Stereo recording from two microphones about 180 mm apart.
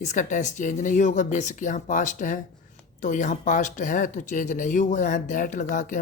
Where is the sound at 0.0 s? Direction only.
45° left (ahead or behind).